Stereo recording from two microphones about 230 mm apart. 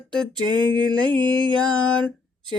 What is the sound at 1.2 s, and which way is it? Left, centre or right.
Mantra, right.